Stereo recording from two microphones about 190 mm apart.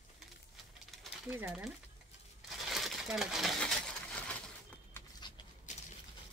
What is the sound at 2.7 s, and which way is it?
Coin, centre (ahead or behind).